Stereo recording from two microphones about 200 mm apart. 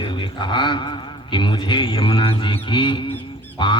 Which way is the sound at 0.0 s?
25° left (ahead or behind).